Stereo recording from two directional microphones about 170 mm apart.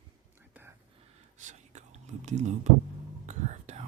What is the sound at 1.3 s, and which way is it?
Whispering, 45° right (ahead or behind).